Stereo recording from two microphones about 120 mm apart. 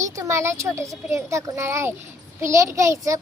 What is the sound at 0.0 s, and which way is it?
A child's voice, 25° right (ahead or behind).